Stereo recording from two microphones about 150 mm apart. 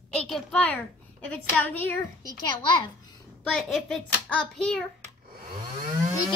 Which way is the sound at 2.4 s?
30° left (ahead or behind).